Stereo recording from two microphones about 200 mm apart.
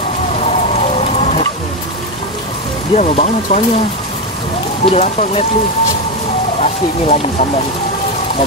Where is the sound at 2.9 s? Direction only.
35° left (ahead or behind).